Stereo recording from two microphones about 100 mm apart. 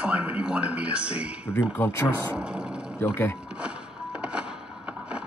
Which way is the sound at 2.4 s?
10° right (ahead or behind).